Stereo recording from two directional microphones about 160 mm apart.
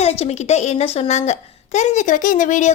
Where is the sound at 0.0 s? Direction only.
40° left (ahead or behind).